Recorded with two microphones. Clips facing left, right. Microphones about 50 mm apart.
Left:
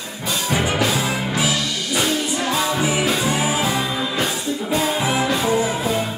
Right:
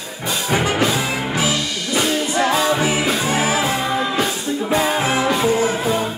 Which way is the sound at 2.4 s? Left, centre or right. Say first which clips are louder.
Right 4 dB; right.